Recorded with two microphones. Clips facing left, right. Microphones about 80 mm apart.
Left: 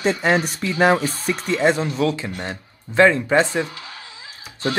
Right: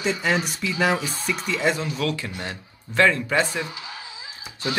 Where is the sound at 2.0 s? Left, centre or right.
Left.